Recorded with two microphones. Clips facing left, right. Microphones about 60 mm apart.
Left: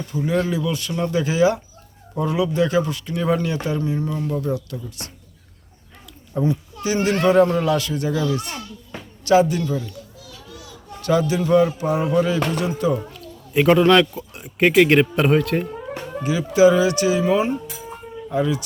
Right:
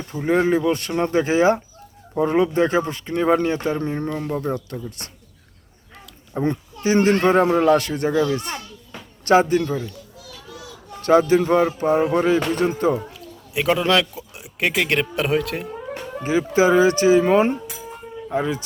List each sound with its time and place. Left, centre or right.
0.1 s speech: right
6.4 s speech: right
7.7 s speech: right
11.0 s speech: right
13.0 s speech: centre
16.2 s speech: right
17.8 s a sound: centre
18.3 s speech: right